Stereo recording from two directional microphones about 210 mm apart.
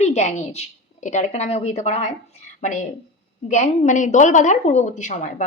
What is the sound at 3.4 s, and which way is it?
Speech, 35° left (ahead or behind).